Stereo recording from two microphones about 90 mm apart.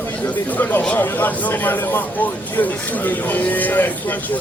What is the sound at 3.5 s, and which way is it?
Speech, 20° left (ahead or behind).